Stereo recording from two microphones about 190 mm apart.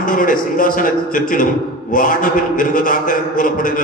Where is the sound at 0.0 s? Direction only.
45° left (ahead or behind).